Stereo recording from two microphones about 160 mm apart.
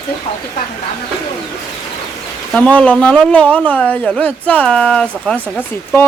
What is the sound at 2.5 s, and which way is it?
A man's voice, 10° left (ahead or behind).